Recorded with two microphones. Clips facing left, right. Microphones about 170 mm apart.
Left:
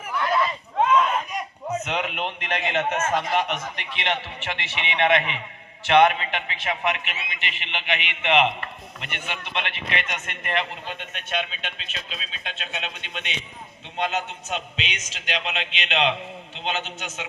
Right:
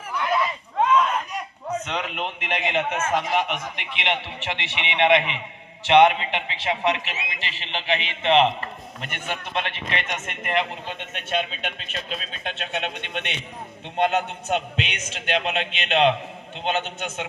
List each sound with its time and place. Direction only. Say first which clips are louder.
0.8 s a sound: even; centre (ahead or behind)
1.8 s a man's voice: left 1 dB; 5° left (ahead or behind); by 8.7 s 30° right (ahead or behind)
9.0 s a man's voice: right 2 dB; 45° right (ahead or behind); by 10.6 s 20° right (ahead or behind)
11.1 s a man's voice: right 4 dB; 30° right (ahead or behind)
11.9 s speech: right 5 dB; 50° right (ahead or behind)
12.5 s a man's voice: right 5 dB; 60° right (ahead or behind)